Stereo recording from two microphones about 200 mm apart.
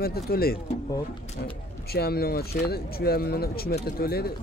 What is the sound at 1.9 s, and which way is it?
Speech, 50° left (ahead or behind).